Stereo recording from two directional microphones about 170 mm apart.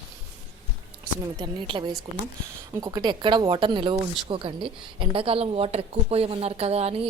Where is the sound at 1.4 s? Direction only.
30° right (ahead or behind).